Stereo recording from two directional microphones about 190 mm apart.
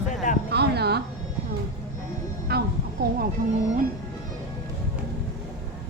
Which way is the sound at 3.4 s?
40° right (ahead or behind).